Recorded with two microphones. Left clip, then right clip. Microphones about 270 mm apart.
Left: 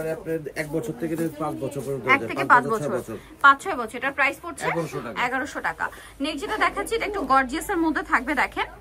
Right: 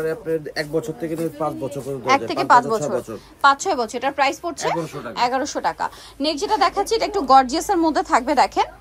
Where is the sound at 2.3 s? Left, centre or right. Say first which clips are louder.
Right 5 dB; centre.